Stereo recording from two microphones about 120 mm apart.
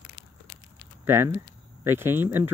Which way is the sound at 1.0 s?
20° right (ahead or behind).